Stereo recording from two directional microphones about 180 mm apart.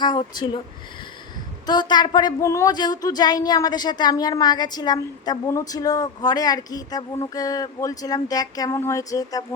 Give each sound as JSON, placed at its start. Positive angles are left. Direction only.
{"t": 0.0, "sound": "speech", "side_deg": 25}
{"t": 1.6, "sound": "speech", "side_deg": 25}